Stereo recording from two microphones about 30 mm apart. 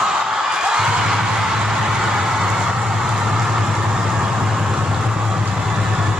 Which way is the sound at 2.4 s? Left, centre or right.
Right.